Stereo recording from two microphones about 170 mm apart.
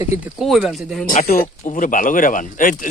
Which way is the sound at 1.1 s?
50° left (ahead or behind).